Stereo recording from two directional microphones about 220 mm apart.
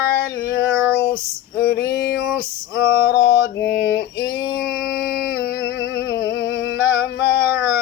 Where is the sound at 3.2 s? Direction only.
50° left (ahead or behind).